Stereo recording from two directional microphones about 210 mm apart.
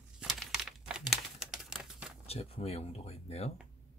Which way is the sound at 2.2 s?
30° left (ahead or behind).